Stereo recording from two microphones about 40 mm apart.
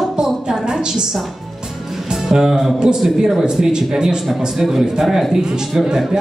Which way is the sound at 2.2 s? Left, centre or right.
Centre.